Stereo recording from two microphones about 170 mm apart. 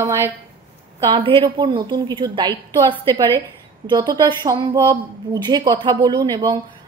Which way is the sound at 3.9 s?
25° right (ahead or behind).